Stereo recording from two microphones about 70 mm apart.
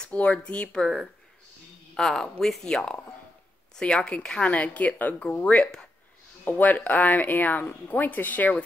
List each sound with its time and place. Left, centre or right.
0.0 s speech: centre
2.0 s speech: centre; by 8.6 s left